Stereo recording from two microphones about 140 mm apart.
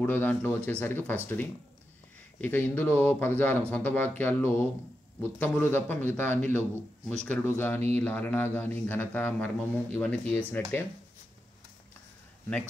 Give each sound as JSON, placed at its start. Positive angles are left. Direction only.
{"t": 0.0, "sound": "speech", "side_deg": 15}